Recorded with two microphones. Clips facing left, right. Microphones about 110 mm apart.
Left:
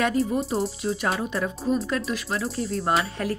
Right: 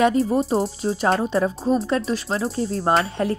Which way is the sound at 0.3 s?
35° right (ahead or behind).